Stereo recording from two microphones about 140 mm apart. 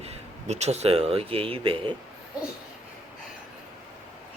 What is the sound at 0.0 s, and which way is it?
Speech, 50° right (ahead or behind).